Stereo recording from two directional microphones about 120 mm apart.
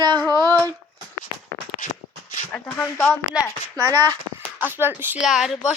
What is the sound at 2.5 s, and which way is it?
Speech, 15° left (ahead or behind).